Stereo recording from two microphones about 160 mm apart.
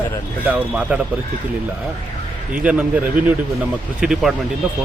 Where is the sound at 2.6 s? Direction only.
10° right (ahead or behind).